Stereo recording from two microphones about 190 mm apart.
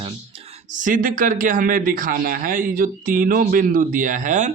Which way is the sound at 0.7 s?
45° right (ahead or behind).